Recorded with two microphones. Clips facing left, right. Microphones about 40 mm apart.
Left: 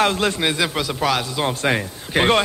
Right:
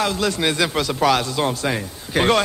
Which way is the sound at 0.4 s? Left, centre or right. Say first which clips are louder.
Right 1 dB; centre.